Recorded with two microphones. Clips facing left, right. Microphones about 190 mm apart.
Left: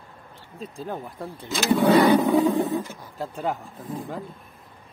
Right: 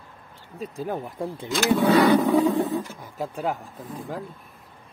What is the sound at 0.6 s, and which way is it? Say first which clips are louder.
Speech: right 3 dB; 10° right (ahead or behind).